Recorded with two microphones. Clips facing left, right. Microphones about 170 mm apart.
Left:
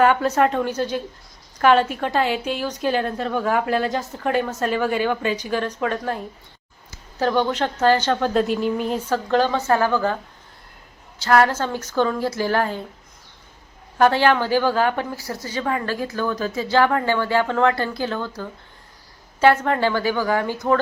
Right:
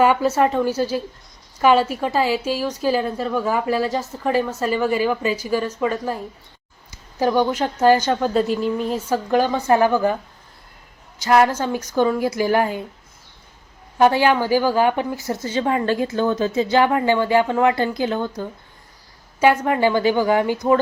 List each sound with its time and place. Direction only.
0.0 s a woman's voice: 5° right (ahead or behind)
9.0 s a woman's voice: 10° right (ahead or behind)
11.2 s a woman's voice: 10° right (ahead or behind)
14.0 s a woman's voice: 10° right (ahead or behind)